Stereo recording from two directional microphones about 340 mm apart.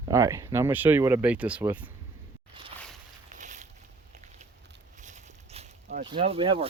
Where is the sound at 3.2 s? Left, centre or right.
Right.